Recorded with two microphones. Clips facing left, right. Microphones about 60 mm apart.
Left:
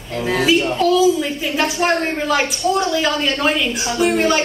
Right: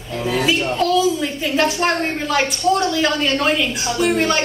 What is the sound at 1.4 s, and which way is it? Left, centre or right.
A woman's voice, centre.